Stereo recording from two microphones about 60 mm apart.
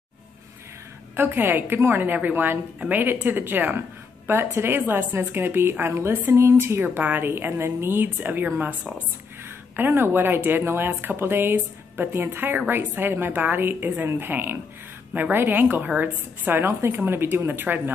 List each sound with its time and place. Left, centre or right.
1.1 s a woman's voice: right
6.9 s a woman's voice: right